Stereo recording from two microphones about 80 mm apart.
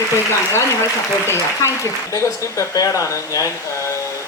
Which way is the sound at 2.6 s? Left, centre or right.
Left.